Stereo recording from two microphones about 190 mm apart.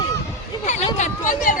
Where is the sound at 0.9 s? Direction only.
40° left (ahead or behind).